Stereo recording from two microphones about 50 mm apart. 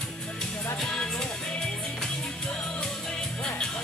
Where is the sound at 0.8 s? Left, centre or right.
Centre.